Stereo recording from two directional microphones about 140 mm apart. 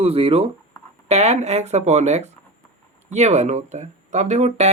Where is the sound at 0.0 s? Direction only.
45° right (ahead or behind).